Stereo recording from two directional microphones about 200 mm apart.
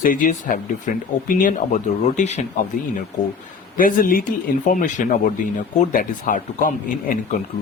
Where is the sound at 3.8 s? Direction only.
45° left (ahead or behind).